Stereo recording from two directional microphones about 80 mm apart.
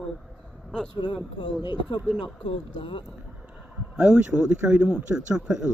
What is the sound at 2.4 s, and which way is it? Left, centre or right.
Speech, left.